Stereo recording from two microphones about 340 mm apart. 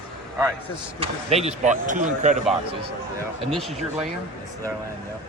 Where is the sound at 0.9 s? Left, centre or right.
Centre.